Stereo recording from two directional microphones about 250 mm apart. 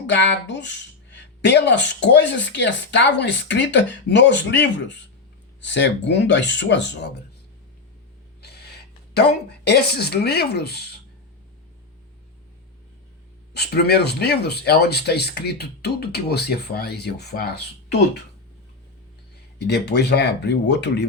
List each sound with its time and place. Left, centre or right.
0.1 s speech: left
8.4 s a sound: left
9.6 s speech: left
13.5 s speech: left
19.5 s speech: left